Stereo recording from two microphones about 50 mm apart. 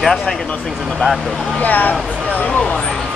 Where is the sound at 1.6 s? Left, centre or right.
Left.